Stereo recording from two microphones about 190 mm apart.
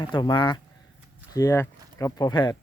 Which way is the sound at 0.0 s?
25° left (ahead or behind).